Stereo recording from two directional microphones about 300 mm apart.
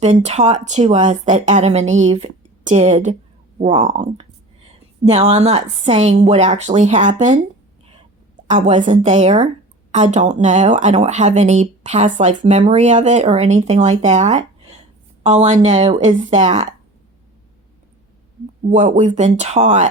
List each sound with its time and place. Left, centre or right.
0.0 s speech: right
8.4 s speech: right
18.7 s speech: right